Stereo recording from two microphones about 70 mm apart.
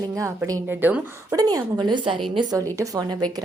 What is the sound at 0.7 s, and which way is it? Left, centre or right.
Speech, right.